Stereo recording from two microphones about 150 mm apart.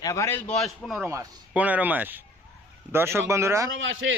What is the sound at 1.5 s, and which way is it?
Speech, 10° right (ahead or behind).